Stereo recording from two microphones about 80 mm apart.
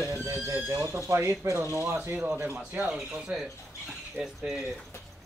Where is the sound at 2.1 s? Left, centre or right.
Centre.